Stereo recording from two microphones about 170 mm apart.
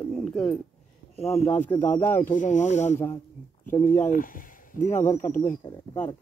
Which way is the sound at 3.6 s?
15° left (ahead or behind).